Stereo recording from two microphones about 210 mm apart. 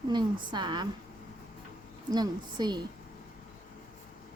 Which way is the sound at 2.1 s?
20° right (ahead or behind).